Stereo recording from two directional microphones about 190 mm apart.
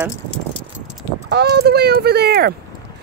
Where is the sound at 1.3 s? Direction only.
60° right (ahead or behind).